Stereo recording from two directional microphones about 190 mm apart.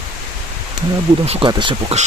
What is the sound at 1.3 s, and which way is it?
Speech, 25° right (ahead or behind).